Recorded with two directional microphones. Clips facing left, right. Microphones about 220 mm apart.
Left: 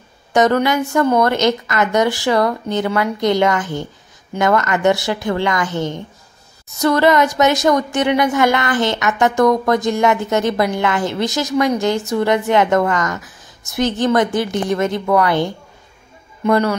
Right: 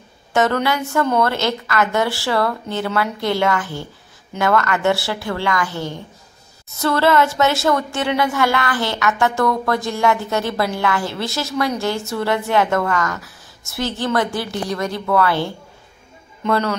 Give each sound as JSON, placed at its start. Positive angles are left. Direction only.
{"t": 0.3, "sound": "a woman's voice", "side_deg": 15}